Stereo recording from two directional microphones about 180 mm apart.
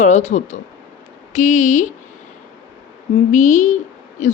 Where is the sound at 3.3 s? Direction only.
45° left (ahead or behind).